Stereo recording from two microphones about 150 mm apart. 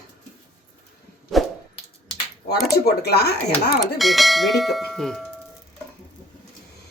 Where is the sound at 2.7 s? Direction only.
90° left.